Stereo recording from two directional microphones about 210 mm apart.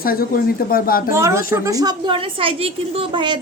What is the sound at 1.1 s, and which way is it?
A woman's voice, 15° right (ahead or behind).